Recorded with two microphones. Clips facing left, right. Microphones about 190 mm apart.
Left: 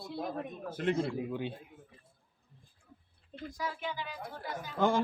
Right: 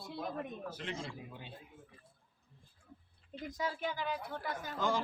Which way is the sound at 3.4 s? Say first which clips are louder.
Even; 20° right (ahead or behind).